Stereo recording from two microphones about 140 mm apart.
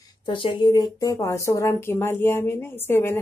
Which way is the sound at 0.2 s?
35° left (ahead or behind).